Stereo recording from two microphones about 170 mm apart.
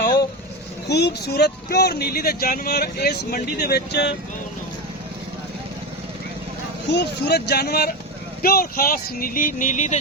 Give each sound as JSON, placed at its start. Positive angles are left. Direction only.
{"t": 0.9, "sound": "speech", "side_deg": 80}
{"t": 6.9, "sound": "speech", "side_deg": 80}